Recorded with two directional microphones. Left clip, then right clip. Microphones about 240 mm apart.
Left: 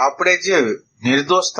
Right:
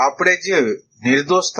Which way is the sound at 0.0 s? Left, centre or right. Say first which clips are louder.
Even; centre.